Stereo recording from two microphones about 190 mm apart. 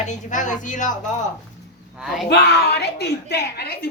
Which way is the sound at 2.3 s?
60° left (ahead or behind).